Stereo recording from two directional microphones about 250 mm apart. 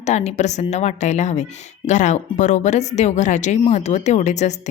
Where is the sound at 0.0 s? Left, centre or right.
Left.